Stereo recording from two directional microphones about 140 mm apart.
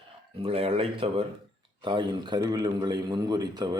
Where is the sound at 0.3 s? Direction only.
45° right (ahead or behind).